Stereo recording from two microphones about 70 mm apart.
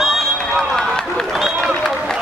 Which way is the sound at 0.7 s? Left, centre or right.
Centre.